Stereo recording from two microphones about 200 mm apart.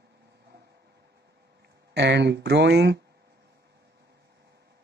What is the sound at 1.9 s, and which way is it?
Speech, 60° right (ahead or behind).